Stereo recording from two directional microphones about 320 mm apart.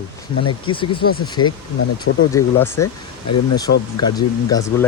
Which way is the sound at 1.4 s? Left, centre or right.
Left.